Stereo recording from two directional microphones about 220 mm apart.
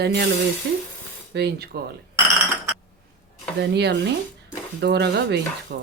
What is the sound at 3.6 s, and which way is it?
Speech, 50° right (ahead or behind).